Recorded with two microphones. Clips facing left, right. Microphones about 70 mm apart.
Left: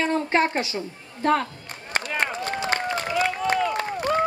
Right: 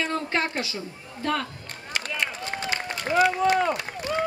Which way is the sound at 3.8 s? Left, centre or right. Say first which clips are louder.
Left 6 dB; left.